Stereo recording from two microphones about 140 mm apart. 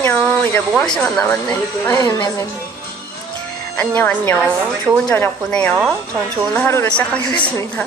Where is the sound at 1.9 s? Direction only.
25° left (ahead or behind).